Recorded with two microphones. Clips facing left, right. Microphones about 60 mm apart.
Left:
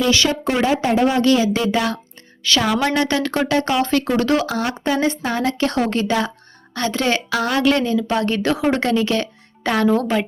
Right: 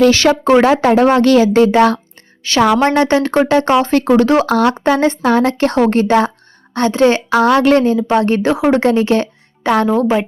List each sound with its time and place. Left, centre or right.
0.0 s a woman's voice: right
0.5 s a woman's voice: right
2.4 s a woman's voice: right
4.4 s a woman's voice: right
9.9 s a woman's voice: centre